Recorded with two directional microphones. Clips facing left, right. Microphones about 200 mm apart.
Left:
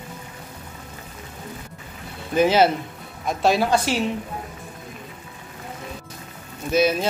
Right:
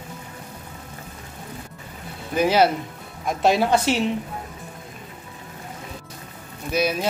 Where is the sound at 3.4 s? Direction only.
20° right (ahead or behind).